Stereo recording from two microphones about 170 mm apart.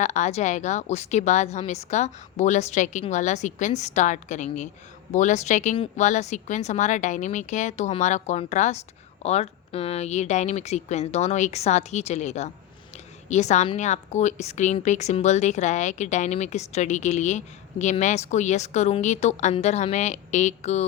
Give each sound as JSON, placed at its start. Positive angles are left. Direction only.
{"t": 0.0, "sound": "a woman's voice", "side_deg": 45}